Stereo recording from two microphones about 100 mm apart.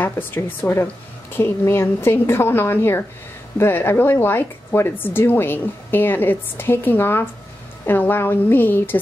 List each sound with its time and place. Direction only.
0.0 s a woman's voice: 20° left (ahead or behind)